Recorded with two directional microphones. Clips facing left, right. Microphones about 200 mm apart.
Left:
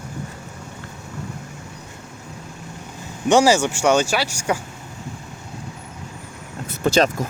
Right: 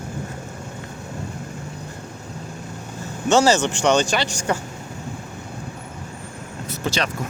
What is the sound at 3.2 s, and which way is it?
Speech, 10° left (ahead or behind).